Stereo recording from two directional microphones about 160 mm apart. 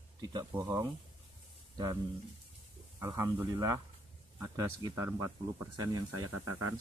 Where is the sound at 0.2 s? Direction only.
25° right (ahead or behind).